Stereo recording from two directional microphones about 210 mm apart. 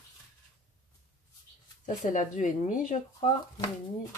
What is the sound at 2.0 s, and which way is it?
Speech, 35° left (ahead or behind).